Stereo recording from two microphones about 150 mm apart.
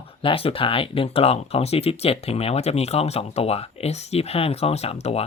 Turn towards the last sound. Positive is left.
turn(degrees=40)  # may be behind; listen again after turning